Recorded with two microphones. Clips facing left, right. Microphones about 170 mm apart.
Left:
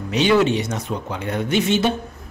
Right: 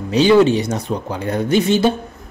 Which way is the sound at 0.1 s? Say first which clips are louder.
Right 5 dB; 30° right (ahead or behind).